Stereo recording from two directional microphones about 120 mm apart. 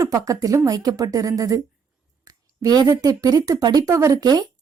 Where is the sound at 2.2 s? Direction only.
30° right (ahead or behind).